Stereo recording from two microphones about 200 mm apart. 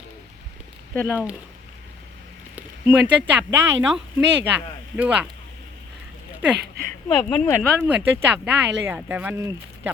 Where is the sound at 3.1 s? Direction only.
10° right (ahead or behind).